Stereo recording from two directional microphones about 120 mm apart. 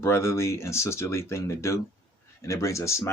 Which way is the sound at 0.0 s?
20° left (ahead or behind).